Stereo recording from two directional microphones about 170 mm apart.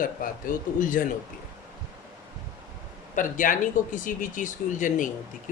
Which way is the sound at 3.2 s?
50° left (ahead or behind).